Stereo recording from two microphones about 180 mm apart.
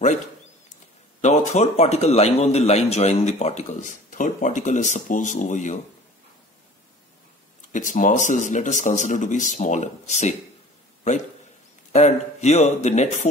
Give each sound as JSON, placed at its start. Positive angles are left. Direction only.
{"t": 1.2, "sound": "a man's voice", "side_deg": 40}
{"t": 7.7, "sound": "speech", "side_deg": 45}
{"t": 11.9, "sound": "a man's voice", "side_deg": 40}